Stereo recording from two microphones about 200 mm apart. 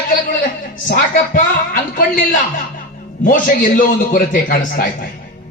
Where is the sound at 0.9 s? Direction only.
45° left (ahead or behind).